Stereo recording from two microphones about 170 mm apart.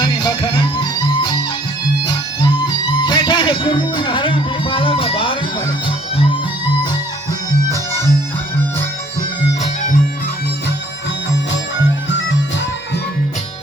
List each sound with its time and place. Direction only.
0.0 s music: 25° left (ahead or behind)
3.0 s music: 25° left (ahead or behind)